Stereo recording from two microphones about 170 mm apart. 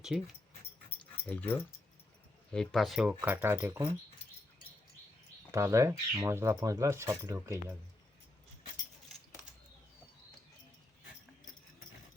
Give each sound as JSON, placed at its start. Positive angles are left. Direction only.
{"t": 0.1, "sound": "speech", "side_deg": 0}
{"t": 1.3, "sound": "speech", "side_deg": 10}
{"t": 5.5, "sound": "speech", "side_deg": -15}